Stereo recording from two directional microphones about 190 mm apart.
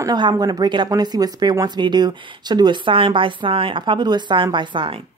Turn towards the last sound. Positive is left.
turn(degrees=-25)  # may be behind; listen again after turning